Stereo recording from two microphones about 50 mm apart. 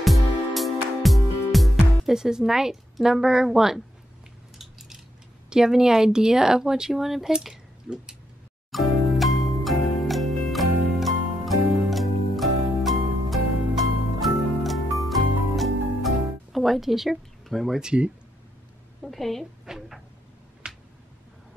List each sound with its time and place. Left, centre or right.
0.6 s music: centre
2.1 s speech: centre
4.6 s a sound: centre
5.5 s speech: centre
8.7 s music: centre
16.5 s speech: centre
19.0 s a woman's voice: centre
19.6 s a sound: centre